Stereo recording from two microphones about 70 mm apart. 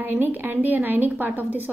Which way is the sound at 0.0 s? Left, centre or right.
Right.